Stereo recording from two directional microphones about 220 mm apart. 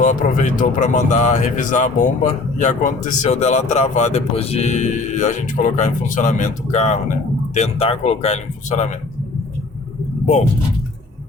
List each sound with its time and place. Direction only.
0.0 s speech: 35° left (ahead or behind)